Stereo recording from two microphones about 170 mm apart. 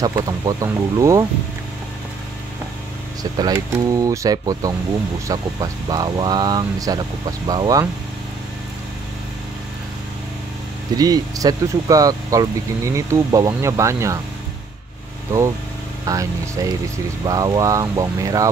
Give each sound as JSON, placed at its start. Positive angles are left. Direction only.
{"t": 0.0, "sound": "speech", "side_deg": -20}
{"t": 3.2, "sound": "speech", "side_deg": -20}
{"t": 11.0, "sound": "speech", "side_deg": -20}
{"t": 16.1, "sound": "speech", "side_deg": -20}